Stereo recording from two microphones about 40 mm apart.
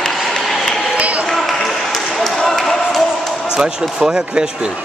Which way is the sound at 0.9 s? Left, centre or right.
Right.